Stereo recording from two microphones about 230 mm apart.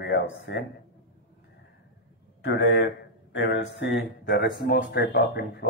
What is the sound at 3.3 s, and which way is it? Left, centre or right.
Speech, left.